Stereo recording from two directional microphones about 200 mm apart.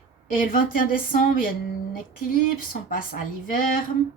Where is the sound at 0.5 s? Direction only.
45° left (ahead or behind).